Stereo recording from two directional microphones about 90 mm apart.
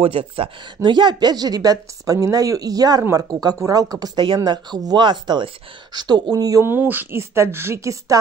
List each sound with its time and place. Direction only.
0.0 s speech: 90° right
0.8 s speech: 55° right (ahead or behind)
6.6 s a woman's voice: 25° right (ahead or behind)